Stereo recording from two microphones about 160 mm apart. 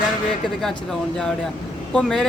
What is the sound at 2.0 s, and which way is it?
Speech, 5° left (ahead or behind).